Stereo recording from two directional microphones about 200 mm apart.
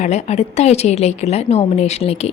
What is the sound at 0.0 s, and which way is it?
A woman's voice, 35° left (ahead or behind).